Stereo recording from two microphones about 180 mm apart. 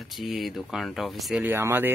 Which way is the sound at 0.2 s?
Centre (ahead or behind).